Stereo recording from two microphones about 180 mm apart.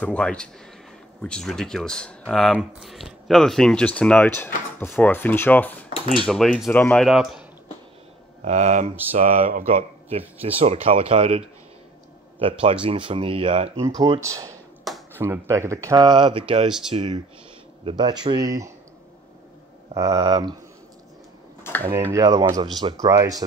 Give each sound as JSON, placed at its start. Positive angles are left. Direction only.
{"t": 0.0, "sound": "speech", "side_deg": 5}
{"t": 8.5, "sound": "speech", "side_deg": -40}
{"t": 13.7, "sound": "speech", "side_deg": -20}
{"t": 20.0, "sound": "speech", "side_deg": -20}
{"t": 22.1, "sound": "speech", "side_deg": -20}